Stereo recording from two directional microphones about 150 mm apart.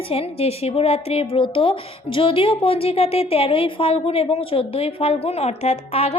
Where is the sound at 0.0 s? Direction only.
40° left (ahead or behind).